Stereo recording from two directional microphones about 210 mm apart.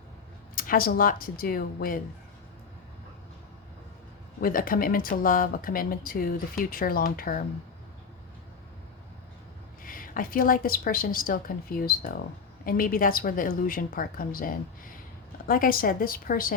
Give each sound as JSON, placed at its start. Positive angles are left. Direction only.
{"t": 0.5, "sound": "speech", "side_deg": 40}
{"t": 4.4, "sound": "speech", "side_deg": 45}
{"t": 9.8, "sound": "speech", "side_deg": 40}